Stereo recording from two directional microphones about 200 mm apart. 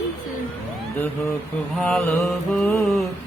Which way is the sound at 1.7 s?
Centre (ahead or behind).